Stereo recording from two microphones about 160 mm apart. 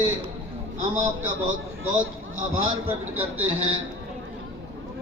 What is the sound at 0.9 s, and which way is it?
Speech, 15° right (ahead or behind).